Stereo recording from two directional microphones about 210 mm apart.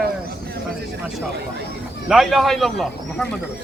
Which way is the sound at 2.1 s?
Centre (ahead or behind).